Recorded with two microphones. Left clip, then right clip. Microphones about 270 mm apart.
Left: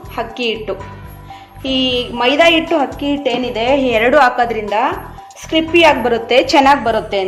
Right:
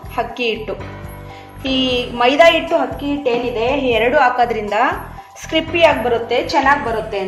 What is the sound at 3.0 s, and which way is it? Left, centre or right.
A woman's voice, left.